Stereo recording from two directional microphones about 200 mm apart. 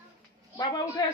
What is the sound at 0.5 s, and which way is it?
Speech, 20° left (ahead or behind).